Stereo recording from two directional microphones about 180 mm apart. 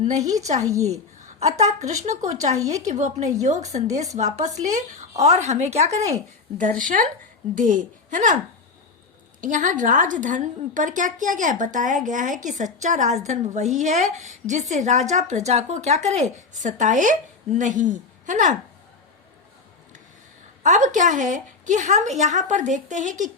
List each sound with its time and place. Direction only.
0.2 s a woman's voice: 20° right (ahead or behind)
0.9 s a woman's voice: 40° right (ahead or behind)
2.6 s a woman's voice: 20° right (ahead or behind)
2.8 s a woman's voice: 40° right (ahead or behind)
6.6 s a woman's voice: 45° right (ahead or behind)
9.4 s a woman's voice: 45° right (ahead or behind)
20.7 s a woman's voice: 45° right (ahead or behind)